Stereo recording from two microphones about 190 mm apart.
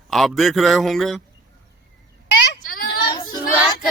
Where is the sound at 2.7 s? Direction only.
50° left (ahead or behind).